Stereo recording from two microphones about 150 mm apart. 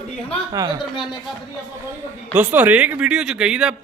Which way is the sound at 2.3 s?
10° right (ahead or behind).